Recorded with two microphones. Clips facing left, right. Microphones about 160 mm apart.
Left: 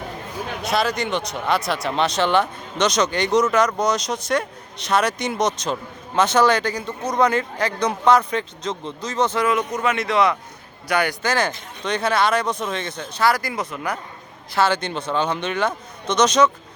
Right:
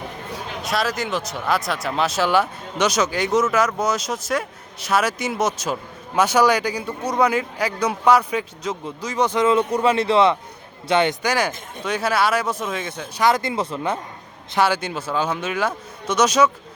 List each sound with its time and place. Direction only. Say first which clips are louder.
0.6 s speech: left 2 dB; centre (ahead or behind)
9.5 s speech: right 4 dB; 30° right (ahead or behind)
11.2 s speech: even; 10° right (ahead or behind)
13.2 s speech: right 1 dB; 25° right (ahead or behind)
14.5 s speech: even; 10° right (ahead or behind)